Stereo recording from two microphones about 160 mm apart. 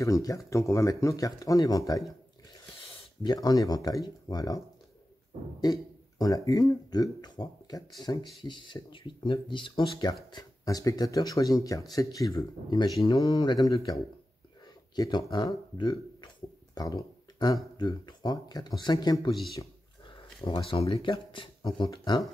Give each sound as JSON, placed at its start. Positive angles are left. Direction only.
{"t": 0.0, "sound": "speech", "side_deg": 20}
{"t": 3.2, "sound": "speech", "side_deg": 25}
{"t": 15.0, "sound": "speech", "side_deg": 25}
{"t": 20.4, "sound": "speech", "side_deg": 35}